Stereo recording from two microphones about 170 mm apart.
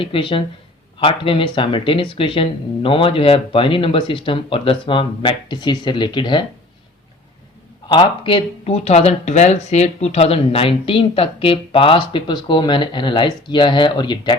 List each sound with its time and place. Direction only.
0.0 s speech: 30° left (ahead or behind)
7.9 s speech: 30° left (ahead or behind)